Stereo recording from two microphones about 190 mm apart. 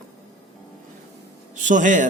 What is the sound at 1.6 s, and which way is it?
Speech, 40° right (ahead or behind).